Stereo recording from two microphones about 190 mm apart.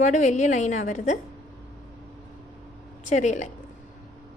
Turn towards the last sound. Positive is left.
turn(degrees=40)  # may be behind; listen again after turning